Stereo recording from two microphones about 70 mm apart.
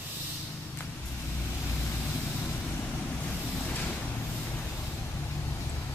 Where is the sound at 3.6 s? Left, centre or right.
Left.